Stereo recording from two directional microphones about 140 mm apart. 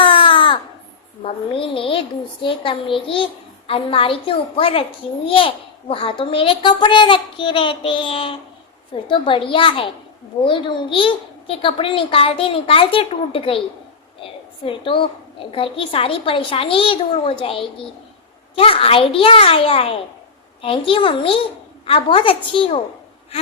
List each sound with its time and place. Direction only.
0.0 s a sound: 35° left (ahead or behind)
1.2 s a child's voice: 40° left (ahead or behind)
14.6 s a child's voice: 40° left (ahead or behind)